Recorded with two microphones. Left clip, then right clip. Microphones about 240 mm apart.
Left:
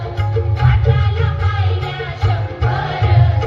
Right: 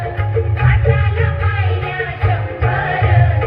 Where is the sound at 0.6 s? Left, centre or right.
Left.